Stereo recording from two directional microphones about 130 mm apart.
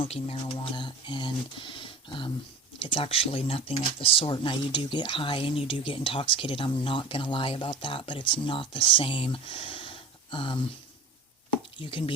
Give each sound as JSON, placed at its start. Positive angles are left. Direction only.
{"t": 0.0, "sound": "speech", "side_deg": 50}
{"t": 11.8, "sound": "speech", "side_deg": 40}